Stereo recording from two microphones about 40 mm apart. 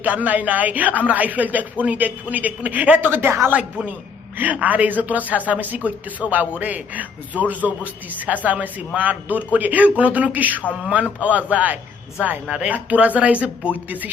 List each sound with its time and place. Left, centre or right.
0.0 s speech: right
3.1 s a woman's voice: right
3.5 s a woman's voice: right
8.3 s a woman's voice: right
9.0 s speech: right